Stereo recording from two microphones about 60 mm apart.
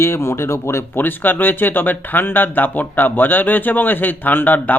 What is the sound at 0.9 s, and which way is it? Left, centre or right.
Speech, left.